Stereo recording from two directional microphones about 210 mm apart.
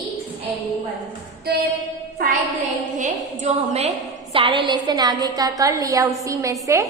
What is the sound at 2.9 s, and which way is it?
A woman's voice, 35° right (ahead or behind).